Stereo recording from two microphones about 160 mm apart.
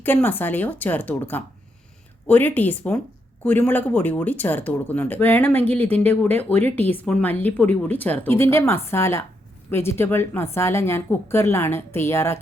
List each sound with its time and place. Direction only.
0.0 s speech: 10° left (ahead or behind)